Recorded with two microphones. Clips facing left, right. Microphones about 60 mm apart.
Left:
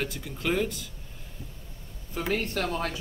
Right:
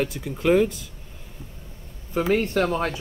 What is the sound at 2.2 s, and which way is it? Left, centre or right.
Speech, right.